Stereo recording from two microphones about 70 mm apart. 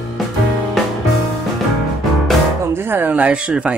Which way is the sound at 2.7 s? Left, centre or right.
Right.